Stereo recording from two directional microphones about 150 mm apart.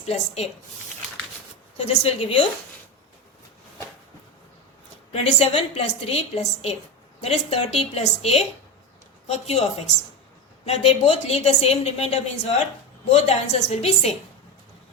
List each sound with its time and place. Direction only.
0.0 s a woman's voice: 45° left (ahead or behind)
1.8 s a woman's voice: 40° left (ahead or behind)
5.1 s a woman's voice: 40° left (ahead or behind)